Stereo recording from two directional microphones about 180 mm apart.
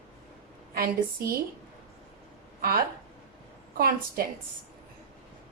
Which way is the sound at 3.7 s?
55° right (ahead or behind).